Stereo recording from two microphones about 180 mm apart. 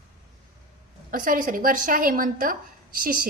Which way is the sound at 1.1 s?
50° right (ahead or behind).